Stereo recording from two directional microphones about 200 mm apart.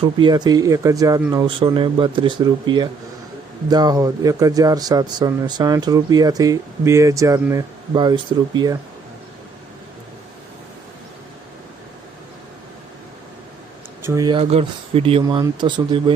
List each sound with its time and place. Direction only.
0.0 s a man's voice: 25° right (ahead or behind)
14.0 s a man's voice: 15° right (ahead or behind)